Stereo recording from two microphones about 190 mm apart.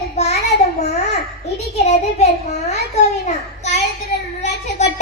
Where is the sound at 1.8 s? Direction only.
35° left (ahead or behind).